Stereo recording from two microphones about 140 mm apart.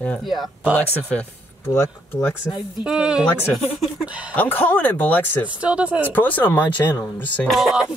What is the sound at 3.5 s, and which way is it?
Speech, centre (ahead or behind).